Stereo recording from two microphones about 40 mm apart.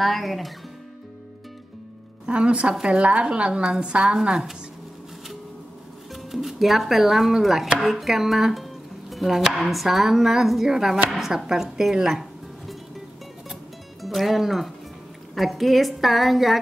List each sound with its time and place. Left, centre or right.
0.0 s speech: centre
2.2 s speech: right
6.3 s speech: centre
14.0 s speech: centre